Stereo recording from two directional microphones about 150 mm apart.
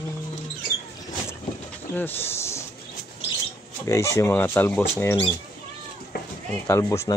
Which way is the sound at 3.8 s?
20° left (ahead or behind).